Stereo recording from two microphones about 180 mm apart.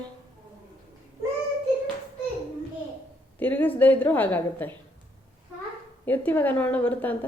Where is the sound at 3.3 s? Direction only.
10° left (ahead or behind).